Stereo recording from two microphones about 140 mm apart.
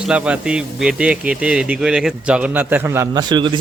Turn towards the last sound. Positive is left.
turn(degrees=-35)  # may be behind; listen again after turning